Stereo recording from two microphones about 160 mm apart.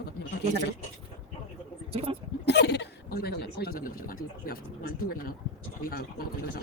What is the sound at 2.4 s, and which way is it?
Speech, 90° left.